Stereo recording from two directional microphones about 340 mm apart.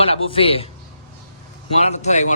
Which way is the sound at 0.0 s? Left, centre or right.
Centre.